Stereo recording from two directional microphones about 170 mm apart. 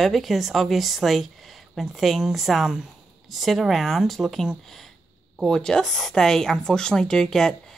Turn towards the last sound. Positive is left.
turn(degrees=5)  # may be behind; listen again after turning